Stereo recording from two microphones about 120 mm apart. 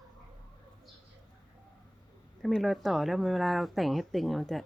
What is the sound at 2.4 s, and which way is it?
Speech, centre (ahead or behind).